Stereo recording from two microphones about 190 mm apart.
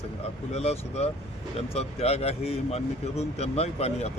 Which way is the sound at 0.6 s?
35° left (ahead or behind).